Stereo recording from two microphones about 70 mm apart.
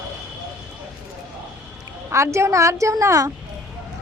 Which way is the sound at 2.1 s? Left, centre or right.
Right.